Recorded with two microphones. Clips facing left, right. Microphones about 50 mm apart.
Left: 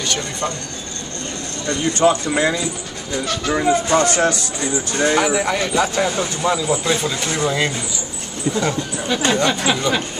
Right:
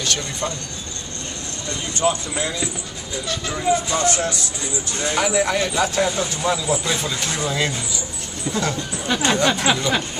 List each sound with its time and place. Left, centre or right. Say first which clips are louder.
0.0 s speech: left 2 dB; centre
1.7 s speech: left 6 dB; left
5.2 s speech: left 1 dB; centre
9.1 s speech: left 1 dB; centre